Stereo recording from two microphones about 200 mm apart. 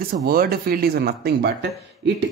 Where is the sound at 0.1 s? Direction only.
45° right (ahead or behind).